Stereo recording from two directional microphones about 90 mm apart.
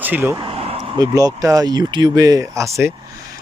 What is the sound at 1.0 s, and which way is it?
Speech, 45° right (ahead or behind).